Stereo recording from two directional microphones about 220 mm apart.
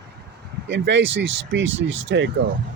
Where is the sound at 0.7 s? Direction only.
55° right (ahead or behind).